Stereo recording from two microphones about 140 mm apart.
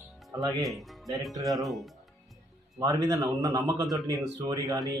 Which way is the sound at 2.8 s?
25° right (ahead or behind).